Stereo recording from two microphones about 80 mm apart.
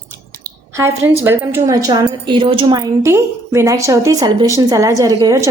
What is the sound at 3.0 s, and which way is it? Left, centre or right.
A woman's voice, right.